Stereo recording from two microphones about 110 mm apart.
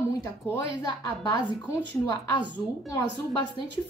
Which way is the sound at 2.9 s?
35° left (ahead or behind).